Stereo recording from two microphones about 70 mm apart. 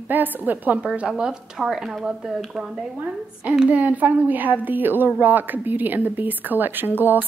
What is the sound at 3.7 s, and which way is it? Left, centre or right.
A woman's voice, right.